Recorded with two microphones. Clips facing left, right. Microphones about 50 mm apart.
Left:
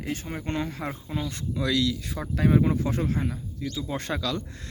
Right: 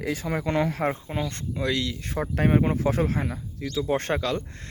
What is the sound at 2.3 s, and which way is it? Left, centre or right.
Speech, right.